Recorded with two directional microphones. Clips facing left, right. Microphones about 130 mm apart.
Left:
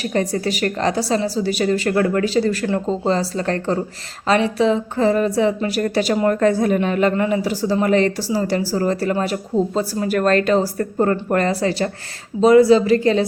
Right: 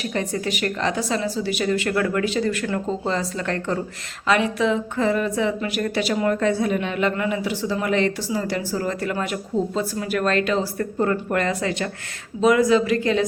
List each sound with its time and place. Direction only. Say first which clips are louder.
0.0 s a woman's voice: left 5 dB; 40° left (ahead or behind)